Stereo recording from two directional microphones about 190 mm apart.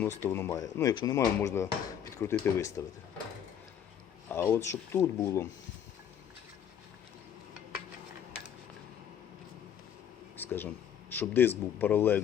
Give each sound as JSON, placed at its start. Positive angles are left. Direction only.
{"t": 0.0, "sound": "speech", "side_deg": 10}
{"t": 4.3, "sound": "speech", "side_deg": 10}
{"t": 10.3, "sound": "a sound", "side_deg": 10}
{"t": 11.1, "sound": "speech", "side_deg": 10}